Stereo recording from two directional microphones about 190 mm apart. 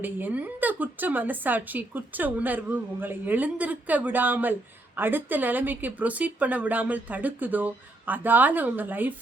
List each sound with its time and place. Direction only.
0.0 s a woman's voice: 10° right (ahead or behind)